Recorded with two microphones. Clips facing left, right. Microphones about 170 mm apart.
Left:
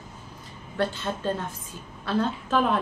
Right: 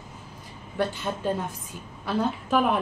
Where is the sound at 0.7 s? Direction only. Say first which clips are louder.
Even; 15° right (ahead or behind).